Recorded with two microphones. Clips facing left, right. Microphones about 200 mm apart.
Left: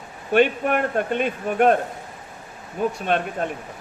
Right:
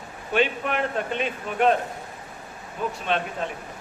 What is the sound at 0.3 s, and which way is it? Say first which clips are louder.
Speech: left 5 dB; 50° left (ahead or behind).